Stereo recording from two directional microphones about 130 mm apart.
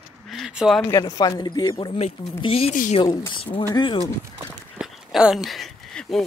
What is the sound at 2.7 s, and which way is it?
Speech, 70° left (ahead or behind).